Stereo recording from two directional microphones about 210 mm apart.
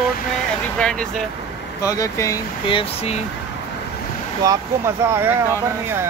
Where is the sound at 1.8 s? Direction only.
15° left (ahead or behind).